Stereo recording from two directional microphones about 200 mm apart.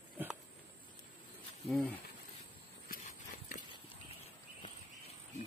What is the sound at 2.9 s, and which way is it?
Horse, 40° left (ahead or behind).